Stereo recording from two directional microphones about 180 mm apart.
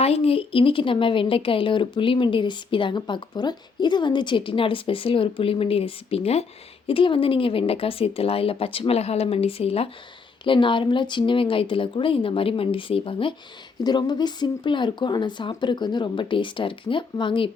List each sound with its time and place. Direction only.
0.0 s a woman's voice: 35° left (ahead or behind)